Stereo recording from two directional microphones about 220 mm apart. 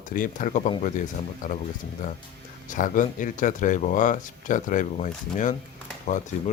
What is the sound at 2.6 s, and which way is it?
Speech, 35° left (ahead or behind).